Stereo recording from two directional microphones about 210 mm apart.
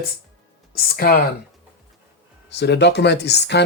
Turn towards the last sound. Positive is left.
turn(degrees=55)  # may be behind; listen again after turning